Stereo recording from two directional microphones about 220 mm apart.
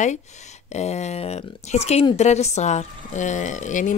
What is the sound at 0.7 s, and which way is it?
A woman's voice, 30° left (ahead or behind).